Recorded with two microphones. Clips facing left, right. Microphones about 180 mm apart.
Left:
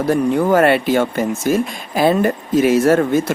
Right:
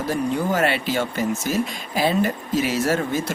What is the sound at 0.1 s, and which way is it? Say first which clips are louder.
Speech: left 8 dB; 55° left (ahead or behind).